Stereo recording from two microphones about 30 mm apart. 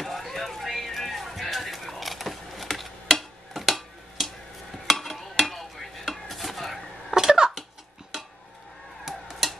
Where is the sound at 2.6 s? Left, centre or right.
Centre.